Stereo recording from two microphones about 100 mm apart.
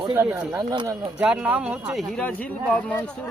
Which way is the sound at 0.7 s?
40° right (ahead or behind).